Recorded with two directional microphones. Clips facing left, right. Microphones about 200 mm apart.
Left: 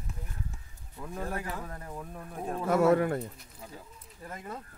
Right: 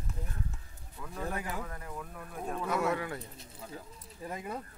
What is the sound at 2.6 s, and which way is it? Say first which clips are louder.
Speech: left 9 dB; 50° left (ahead or behind).